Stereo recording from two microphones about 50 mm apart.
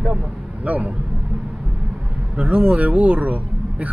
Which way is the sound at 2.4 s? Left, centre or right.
Right.